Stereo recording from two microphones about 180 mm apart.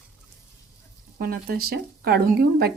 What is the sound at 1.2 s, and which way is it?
Speech, 55° right (ahead or behind).